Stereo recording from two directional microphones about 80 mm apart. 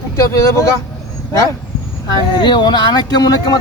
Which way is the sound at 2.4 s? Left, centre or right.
Left.